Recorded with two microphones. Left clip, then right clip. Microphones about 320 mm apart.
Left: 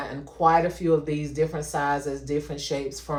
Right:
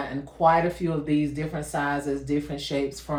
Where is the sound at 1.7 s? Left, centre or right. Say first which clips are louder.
Right 2 dB; centre.